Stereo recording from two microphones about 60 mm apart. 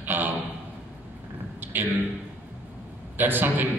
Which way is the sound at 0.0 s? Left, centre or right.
Right.